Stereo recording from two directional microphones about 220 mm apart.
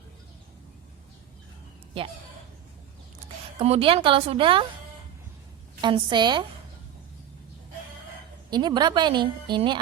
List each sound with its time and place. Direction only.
3.6 s a woman's voice: 25° right (ahead or behind)
5.8 s a woman's voice: 20° right (ahead or behind)
8.4 s a woman's voice: 20° right (ahead or behind)